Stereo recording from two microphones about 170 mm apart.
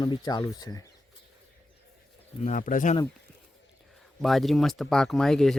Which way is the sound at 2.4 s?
50° left (ahead or behind).